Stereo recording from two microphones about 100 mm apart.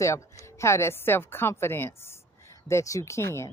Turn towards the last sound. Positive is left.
turn(degrees=30)  # may be behind; listen again after turning